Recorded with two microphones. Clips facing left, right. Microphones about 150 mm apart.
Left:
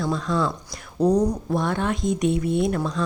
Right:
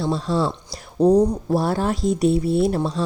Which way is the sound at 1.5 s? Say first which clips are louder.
Right 3 dB; 35° right (ahead or behind).